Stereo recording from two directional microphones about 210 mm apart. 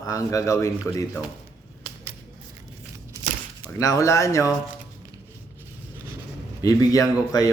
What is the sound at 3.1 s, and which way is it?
Crumpling, 15° right (ahead or behind).